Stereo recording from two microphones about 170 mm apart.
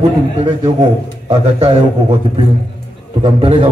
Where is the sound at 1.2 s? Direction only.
30° right (ahead or behind).